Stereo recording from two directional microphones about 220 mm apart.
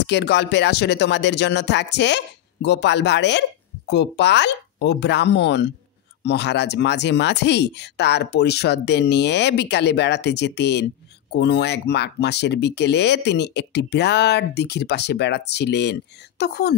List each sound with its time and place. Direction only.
0.0 s speech: 50° left (ahead or behind)